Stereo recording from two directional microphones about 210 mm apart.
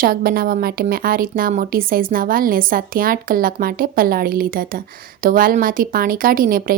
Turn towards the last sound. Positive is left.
turn(degrees=-45)  # may be behind; listen again after turning